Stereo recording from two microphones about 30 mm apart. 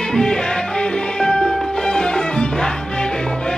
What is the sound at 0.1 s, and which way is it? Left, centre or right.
Music, left.